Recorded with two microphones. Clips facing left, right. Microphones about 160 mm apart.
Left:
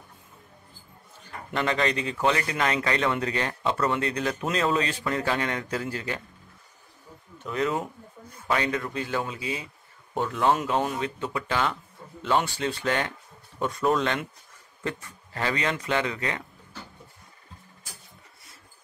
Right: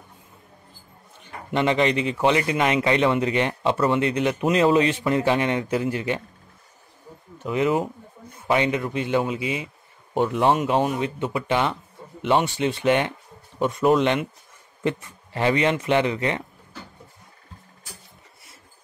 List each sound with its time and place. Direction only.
1.5 s speech: 20° right (ahead or behind)
7.5 s speech: 20° right (ahead or behind)